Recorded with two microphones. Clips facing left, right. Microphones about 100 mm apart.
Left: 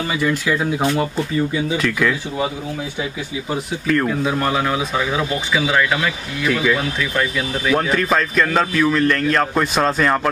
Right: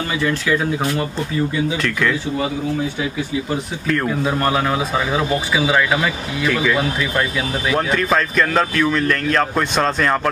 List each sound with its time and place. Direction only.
0.2 s speech: 10° left (ahead or behind)
3.8 s speech: centre (ahead or behind)